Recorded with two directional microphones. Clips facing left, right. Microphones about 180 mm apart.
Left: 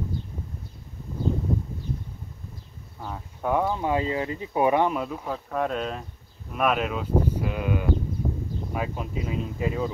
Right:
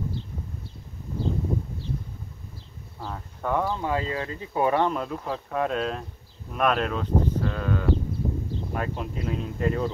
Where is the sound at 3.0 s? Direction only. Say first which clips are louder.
Even; 5° left (ahead or behind).